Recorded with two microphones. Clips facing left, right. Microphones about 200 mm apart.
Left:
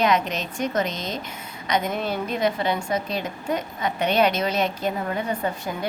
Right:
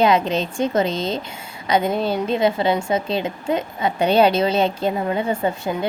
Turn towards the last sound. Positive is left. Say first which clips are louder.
# right 5 dB
turn(degrees=-25)  # may be behind; listen again after turning